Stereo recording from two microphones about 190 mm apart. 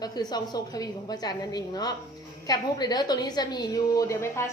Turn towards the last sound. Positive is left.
turn(degrees=15)  # may be behind; listen again after turning